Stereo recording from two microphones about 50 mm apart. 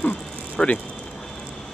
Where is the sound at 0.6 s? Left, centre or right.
Centre.